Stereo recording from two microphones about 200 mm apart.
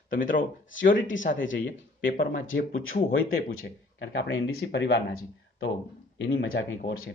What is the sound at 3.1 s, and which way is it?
Speech, 80° left.